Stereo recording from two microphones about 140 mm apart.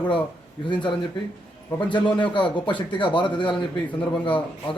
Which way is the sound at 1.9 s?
35° left (ahead or behind).